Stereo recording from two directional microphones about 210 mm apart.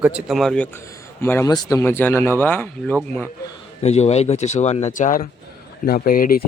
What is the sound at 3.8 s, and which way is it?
Speech, 30° left (ahead or behind).